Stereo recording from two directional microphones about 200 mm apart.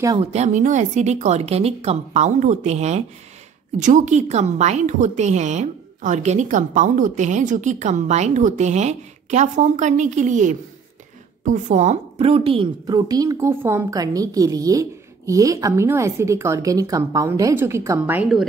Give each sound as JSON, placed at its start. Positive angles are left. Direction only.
{"t": 0.2, "sound": "a woman's voice", "side_deg": -35}